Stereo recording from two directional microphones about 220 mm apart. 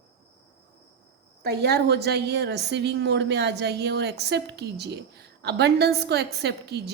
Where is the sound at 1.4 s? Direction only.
45° right (ahead or behind).